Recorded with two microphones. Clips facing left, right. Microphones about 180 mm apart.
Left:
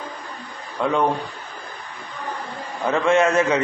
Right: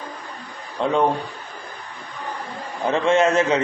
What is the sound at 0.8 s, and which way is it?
Speech, 25° right (ahead or behind).